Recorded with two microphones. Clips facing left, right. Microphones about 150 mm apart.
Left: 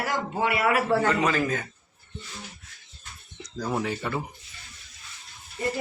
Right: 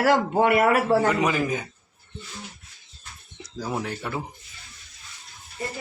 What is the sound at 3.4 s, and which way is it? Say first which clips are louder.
Speech: left 1 dB; 5° right (ahead or behind).